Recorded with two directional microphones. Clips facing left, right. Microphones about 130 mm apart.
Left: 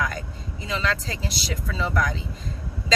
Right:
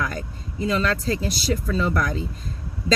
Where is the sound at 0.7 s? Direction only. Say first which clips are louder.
Right 4 dB; 45° right (ahead or behind).